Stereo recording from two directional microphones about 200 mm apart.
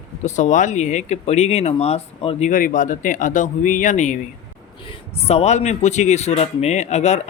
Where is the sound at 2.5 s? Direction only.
40° left (ahead or behind).